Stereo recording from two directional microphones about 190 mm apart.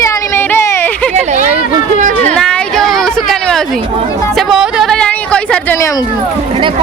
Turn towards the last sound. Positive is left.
turn(degrees=15)  # may be behind; listen again after turning